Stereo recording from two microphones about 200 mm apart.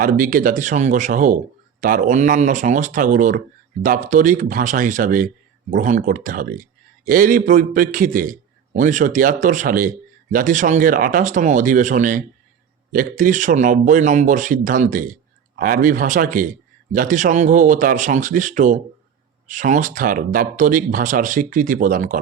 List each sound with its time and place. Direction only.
0.0 s a man's voice: 45° right (ahead or behind)